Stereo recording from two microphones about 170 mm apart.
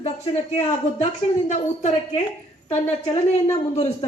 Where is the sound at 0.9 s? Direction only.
45° left (ahead or behind).